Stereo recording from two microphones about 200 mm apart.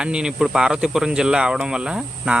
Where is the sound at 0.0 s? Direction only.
5° right (ahead or behind).